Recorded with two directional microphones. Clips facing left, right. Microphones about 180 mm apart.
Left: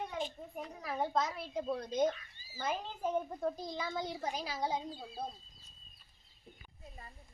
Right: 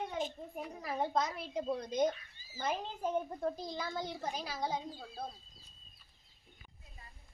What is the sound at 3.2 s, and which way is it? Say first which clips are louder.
Speech: even; centre (ahead or behind).